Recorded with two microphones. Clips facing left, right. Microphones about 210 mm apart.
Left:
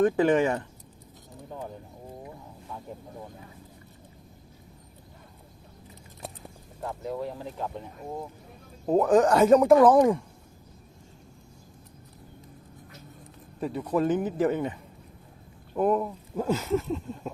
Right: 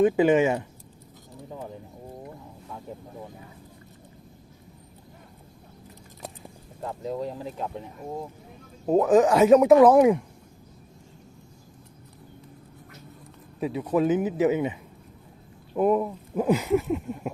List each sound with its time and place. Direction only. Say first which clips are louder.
0.0 s speech: right 2 dB; 10° right (ahead or behind)
6.8 s speech: right 2 dB; 20° right (ahead or behind)
8.9 s speech: right 2 dB; 5° right (ahead or behind)
13.6 s speech: right 2 dB; 5° right (ahead or behind)